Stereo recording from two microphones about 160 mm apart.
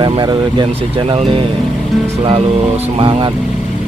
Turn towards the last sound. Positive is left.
turn(degrees=-30)  # may be behind; listen again after turning